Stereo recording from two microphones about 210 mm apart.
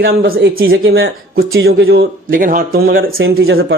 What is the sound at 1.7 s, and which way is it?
Speech, 50° right (ahead or behind).